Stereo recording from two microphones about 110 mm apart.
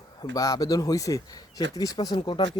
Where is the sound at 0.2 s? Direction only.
35° left (ahead or behind).